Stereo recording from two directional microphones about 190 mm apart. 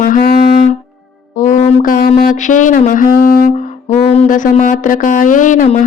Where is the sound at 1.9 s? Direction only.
50° left (ahead or behind).